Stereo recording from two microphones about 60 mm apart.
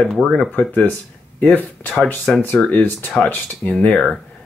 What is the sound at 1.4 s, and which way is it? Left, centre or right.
Speech, left.